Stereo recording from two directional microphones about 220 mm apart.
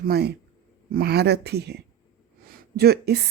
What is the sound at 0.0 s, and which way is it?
A woman's voice, 45° right (ahead or behind).